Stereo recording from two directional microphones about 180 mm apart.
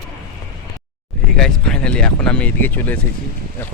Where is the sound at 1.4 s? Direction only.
5° left (ahead or behind).